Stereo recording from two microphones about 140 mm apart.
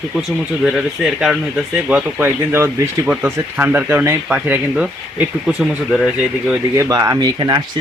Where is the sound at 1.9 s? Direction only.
15° right (ahead or behind).